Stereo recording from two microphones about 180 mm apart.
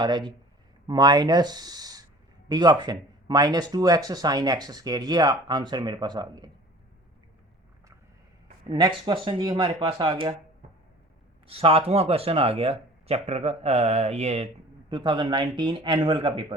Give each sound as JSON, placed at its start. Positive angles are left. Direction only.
{"t": 0.0, "sound": "speech", "side_deg": -25}
{"t": 8.7, "sound": "speech", "side_deg": -25}
{"t": 11.4, "sound": "speech", "side_deg": -30}